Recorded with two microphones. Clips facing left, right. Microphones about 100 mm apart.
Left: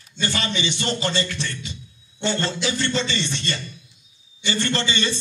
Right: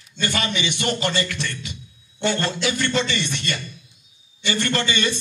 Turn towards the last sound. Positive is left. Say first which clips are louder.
# right 1 dB
turn(degrees=25)  # may be behind; listen again after turning